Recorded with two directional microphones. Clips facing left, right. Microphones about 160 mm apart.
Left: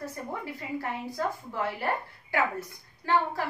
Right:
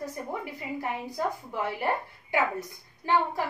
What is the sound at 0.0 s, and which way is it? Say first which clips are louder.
A woman's voice: right 2 dB; 15° right (ahead or behind).